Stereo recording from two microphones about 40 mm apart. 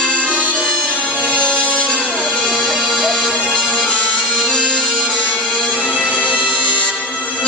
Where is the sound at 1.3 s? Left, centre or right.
Left.